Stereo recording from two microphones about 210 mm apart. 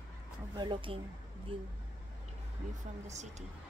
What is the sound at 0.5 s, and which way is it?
Speech, 20° right (ahead or behind).